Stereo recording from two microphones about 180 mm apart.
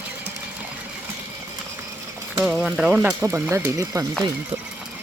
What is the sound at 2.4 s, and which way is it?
Stir, 5° right (ahead or behind).